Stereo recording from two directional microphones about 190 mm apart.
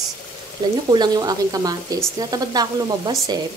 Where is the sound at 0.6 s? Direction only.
20° right (ahead or behind).